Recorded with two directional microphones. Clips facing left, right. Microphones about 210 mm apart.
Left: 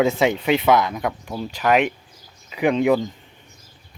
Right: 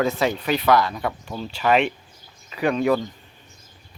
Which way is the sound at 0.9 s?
10° left (ahead or behind).